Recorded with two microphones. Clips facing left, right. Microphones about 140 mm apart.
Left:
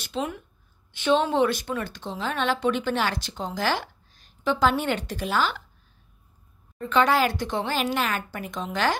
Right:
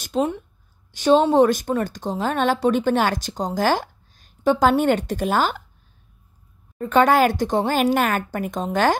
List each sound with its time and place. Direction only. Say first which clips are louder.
0.1 s speech: right 8 dB; 45° right (ahead or behind)
6.8 s speech: right 5 dB; 45° right (ahead or behind)